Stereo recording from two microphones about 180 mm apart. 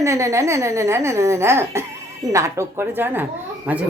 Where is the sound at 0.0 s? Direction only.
15° right (ahead or behind).